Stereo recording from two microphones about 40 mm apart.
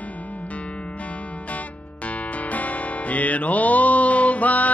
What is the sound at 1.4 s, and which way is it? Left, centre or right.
Music, left.